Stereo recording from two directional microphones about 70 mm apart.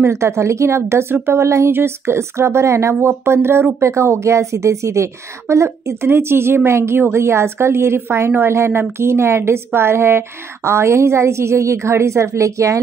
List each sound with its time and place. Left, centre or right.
0.0 s a woman's voice: right